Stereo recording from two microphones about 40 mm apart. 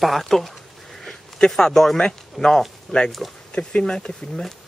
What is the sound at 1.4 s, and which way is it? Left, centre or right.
Speech, left.